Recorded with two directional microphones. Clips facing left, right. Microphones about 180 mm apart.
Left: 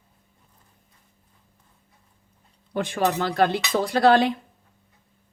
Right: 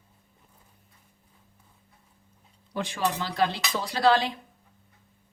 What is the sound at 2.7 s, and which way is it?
Speech, 55° left (ahead or behind).